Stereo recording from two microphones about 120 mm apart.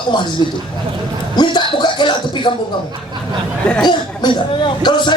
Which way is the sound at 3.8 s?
40° left (ahead or behind).